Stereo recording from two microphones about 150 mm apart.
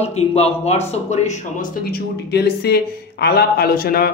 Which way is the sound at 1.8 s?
90° left.